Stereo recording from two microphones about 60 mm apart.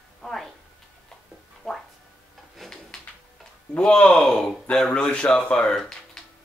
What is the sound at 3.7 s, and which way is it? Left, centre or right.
Speech, centre.